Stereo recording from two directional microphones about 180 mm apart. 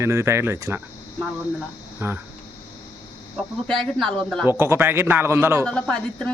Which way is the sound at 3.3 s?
Centre (ahead or behind).